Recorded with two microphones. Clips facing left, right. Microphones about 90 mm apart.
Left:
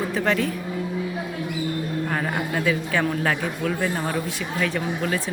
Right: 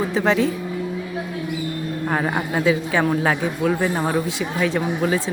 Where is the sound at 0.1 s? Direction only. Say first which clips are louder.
Right 4 dB; 20° right (ahead or behind).